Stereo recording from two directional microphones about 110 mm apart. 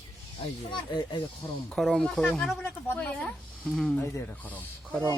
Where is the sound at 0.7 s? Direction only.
45° left (ahead or behind).